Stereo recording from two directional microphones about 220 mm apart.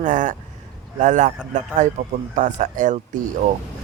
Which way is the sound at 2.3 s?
35° right (ahead or behind).